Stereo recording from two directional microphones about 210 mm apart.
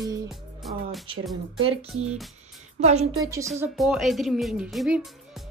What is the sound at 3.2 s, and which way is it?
Speech, 15° right (ahead or behind).